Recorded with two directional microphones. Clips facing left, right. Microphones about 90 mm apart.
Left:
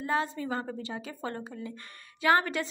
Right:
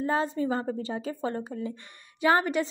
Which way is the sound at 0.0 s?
30° right (ahead or behind).